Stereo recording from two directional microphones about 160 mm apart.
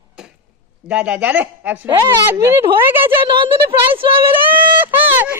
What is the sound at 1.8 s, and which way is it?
Speech, 25° right (ahead or behind).